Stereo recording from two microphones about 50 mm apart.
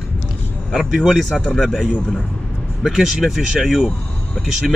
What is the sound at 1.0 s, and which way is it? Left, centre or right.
Speech, centre.